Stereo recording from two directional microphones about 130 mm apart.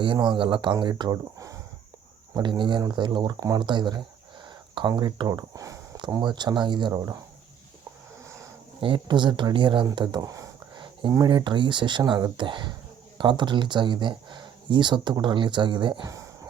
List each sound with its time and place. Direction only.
0.0 s speech: 35° right (ahead or behind)
2.3 s speech: 35° right (ahead or behind)
8.8 s speech: 40° right (ahead or behind)
16.0 s a sound: 25° right (ahead or behind)